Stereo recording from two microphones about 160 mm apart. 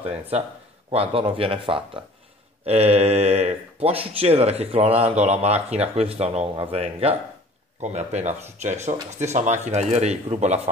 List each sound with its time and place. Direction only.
0.9 s speech: 35° right (ahead or behind)